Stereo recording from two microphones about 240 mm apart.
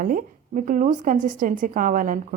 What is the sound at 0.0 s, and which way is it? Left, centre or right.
A woman's voice, right.